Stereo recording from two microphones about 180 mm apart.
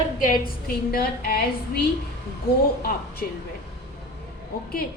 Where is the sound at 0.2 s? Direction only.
55° left (ahead or behind).